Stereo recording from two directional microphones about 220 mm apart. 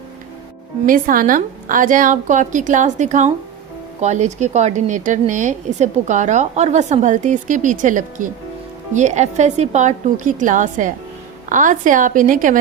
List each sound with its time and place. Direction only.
0.9 s a woman's voice: 40° right (ahead or behind)